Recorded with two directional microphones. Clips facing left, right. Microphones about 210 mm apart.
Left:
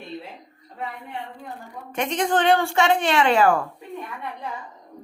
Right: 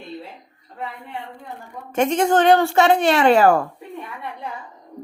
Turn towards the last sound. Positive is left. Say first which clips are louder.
# right 4 dB
turn(degrees=-40)  # may be behind; listen again after turning